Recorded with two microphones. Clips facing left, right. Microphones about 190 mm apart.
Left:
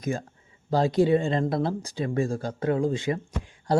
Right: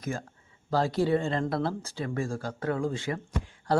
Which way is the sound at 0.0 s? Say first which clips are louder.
Left 5 dB; 20° left (ahead or behind).